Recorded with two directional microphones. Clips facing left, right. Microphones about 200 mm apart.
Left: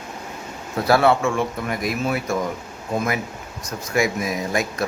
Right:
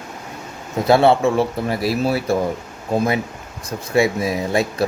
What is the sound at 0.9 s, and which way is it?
Speech, 25° right (ahead or behind).